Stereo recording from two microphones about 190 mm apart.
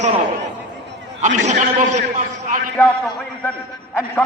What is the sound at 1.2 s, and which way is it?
Speech, 40° right (ahead or behind).